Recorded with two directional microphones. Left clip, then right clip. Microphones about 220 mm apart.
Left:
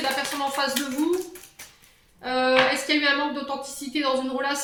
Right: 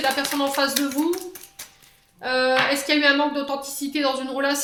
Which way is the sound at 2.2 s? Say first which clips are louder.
Right 1 dB; 50° right (ahead or behind).